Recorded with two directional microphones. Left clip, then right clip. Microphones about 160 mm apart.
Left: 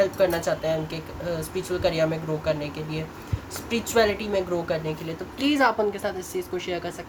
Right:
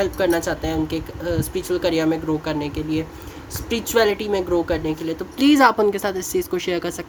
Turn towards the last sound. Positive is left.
turn(degrees=-70)  # may be behind; listen again after turning